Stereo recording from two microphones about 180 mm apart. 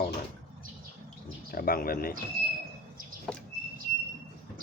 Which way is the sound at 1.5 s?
55° left (ahead or behind).